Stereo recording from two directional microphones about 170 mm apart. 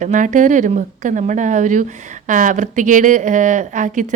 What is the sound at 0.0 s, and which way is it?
Speech, 45° right (ahead or behind).